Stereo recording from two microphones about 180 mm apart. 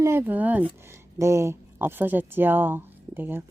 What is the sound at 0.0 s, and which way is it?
Speech, 10° right (ahead or behind).